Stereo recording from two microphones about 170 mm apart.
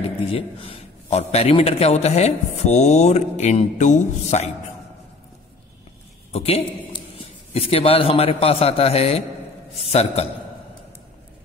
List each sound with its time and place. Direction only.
0.3 s a man's voice: 35° left (ahead or behind)
6.3 s a man's voice: 35° left (ahead or behind)